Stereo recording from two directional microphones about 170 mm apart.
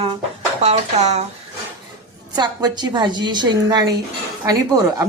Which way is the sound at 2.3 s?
25° right (ahead or behind).